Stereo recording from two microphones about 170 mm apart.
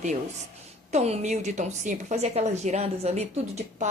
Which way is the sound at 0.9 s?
40° right (ahead or behind).